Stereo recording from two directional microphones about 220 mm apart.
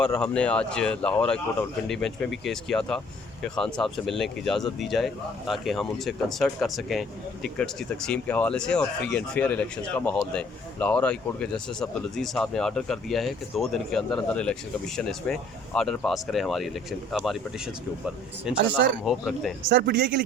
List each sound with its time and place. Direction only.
0.0 s speech: 5° left (ahead or behind)
18.5 s speech: 5° right (ahead or behind)
19.7 s speech: 50° right (ahead or behind)